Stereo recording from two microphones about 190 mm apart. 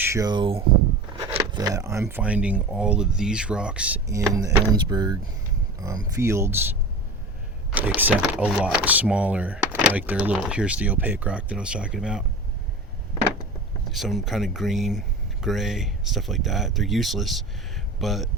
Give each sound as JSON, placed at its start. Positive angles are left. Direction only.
{"t": 0.0, "sound": "speech", "side_deg": -15}
{"t": 13.9, "sound": "speech", "side_deg": 0}